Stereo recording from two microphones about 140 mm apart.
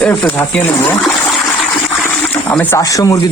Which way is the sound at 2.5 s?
10° left (ahead or behind).